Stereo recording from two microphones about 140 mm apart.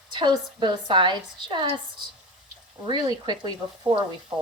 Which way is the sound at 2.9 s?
30° right (ahead or behind).